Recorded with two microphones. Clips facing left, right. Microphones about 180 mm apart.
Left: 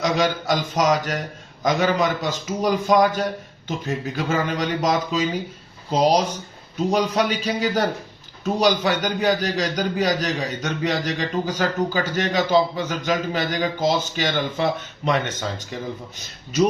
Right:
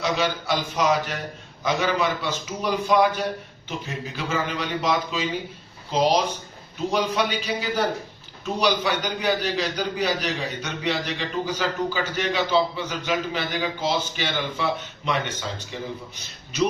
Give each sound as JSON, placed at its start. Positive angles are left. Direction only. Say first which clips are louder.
{"t": 0.0, "sound": "a man's voice", "louder": "left 3 dB", "side_deg": 45}